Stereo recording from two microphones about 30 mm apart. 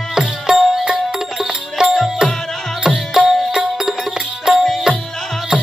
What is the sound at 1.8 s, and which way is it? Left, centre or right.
Music, right.